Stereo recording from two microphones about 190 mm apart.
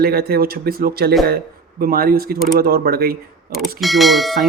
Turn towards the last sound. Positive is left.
turn(degrees=0)  # may be behind; listen again after turning